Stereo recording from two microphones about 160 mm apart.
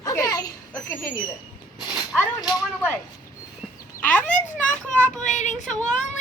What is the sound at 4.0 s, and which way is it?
A child's voice, 10° left (ahead or behind).